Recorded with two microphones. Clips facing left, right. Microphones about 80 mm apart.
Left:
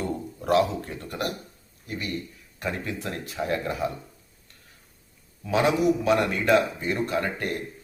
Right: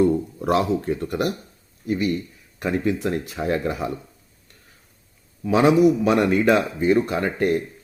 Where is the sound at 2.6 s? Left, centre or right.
Centre.